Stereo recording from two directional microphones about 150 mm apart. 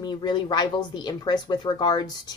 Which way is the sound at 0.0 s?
30° left (ahead or behind).